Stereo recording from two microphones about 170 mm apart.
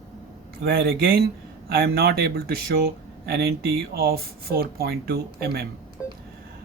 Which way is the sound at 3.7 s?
60° right (ahead or behind).